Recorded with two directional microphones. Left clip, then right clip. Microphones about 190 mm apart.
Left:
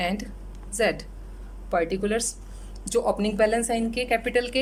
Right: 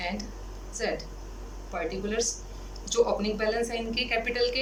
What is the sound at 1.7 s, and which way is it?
A woman's voice, 50° left (ahead or behind).